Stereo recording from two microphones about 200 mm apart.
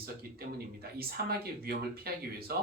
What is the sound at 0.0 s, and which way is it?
Speech, 50° right (ahead or behind).